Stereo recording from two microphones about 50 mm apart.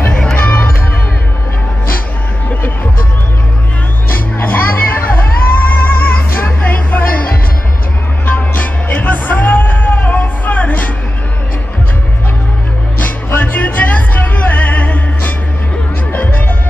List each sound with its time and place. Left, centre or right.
0.1 s music: centre
0.4 s music: left
4.1 s music: left
8.3 s music: left
13.0 s music: left